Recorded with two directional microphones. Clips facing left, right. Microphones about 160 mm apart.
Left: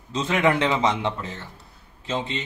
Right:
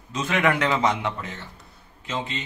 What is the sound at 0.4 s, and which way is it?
Speech, 20° left (ahead or behind).